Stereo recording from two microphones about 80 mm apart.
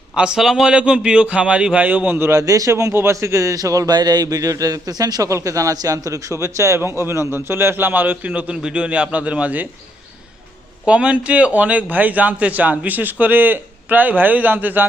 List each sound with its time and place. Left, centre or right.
0.2 s a man's voice: centre; by 2.3 s right
2.3 s a man's voice: right
3.9 s a man's voice: right; by 9.6 s centre
10.8 s a man's voice: centre